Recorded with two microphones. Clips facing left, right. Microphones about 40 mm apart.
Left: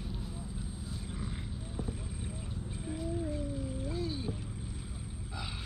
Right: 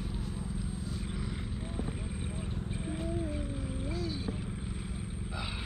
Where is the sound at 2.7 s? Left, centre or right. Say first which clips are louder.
Right 1 dB; right.